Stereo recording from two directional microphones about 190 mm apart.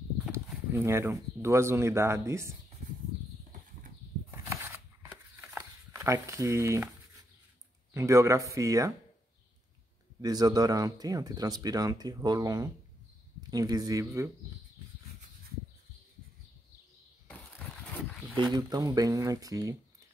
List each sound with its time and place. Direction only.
0.3 s speech: 15° right (ahead or behind)
4.3 s a sound: 10° right (ahead or behind)
7.9 s speech: 15° right (ahead or behind)
10.2 s speech: 20° right (ahead or behind)
18.5 s speech: 20° right (ahead or behind)